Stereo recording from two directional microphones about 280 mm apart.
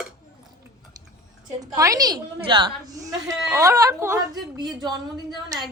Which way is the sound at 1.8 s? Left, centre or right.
Centre.